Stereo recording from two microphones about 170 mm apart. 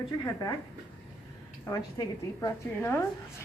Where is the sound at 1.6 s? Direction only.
20° left (ahead or behind).